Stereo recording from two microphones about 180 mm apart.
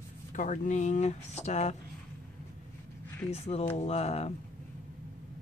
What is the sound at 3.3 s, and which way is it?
Speech, 35° left (ahead or behind).